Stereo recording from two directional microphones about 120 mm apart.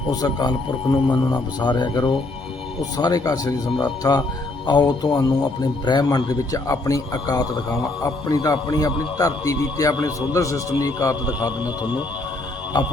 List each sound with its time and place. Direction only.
0.1 s a man's voice: 35° left (ahead or behind)